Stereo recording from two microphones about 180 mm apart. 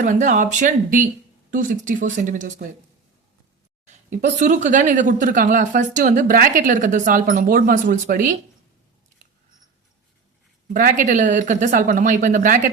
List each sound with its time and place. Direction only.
0.0 s speech: 45° right (ahead or behind)
3.8 s speech: 40° right (ahead or behind)
10.8 s speech: 45° right (ahead or behind)